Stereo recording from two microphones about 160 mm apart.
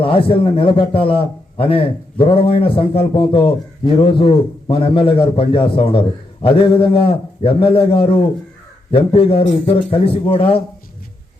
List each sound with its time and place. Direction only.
0.0 s a man's voice: 35° left (ahead or behind)